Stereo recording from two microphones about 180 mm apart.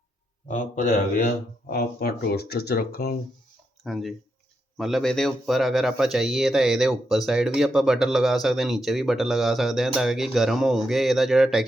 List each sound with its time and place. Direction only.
0.4 s speech: 45° left (ahead or behind)
3.8 s speech: centre (ahead or behind)